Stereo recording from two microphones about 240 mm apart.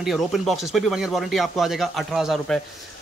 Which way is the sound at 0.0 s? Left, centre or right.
Centre.